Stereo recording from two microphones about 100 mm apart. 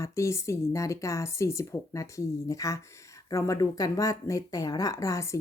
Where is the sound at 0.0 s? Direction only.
30° left (ahead or behind).